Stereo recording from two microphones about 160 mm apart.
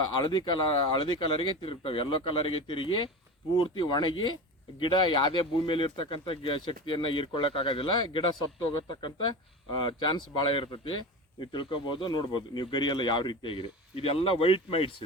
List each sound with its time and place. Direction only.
0.1 s speech: 25° left (ahead or behind)